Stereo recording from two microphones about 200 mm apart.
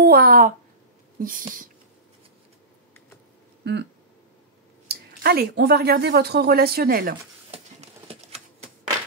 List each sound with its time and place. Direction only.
0.0 s a woman's voice: 50° right (ahead or behind)
3.6 s speech: 55° right (ahead or behind)
4.8 s a woman's voice: 50° right (ahead or behind)
7.5 s a sound: 30° right (ahead or behind)